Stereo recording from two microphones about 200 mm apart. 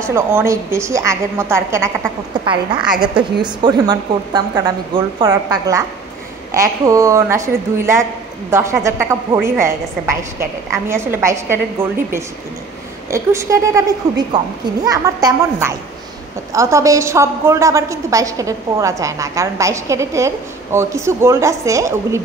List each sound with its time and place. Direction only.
0.0 s a woman's voice: 15° right (ahead or behind)